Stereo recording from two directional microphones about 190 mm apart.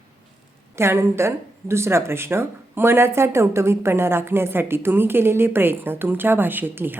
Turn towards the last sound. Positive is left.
turn(degrees=-10)  # may be behind; listen again after turning